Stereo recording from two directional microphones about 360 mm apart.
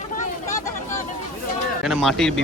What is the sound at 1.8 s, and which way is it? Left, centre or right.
Speech, centre.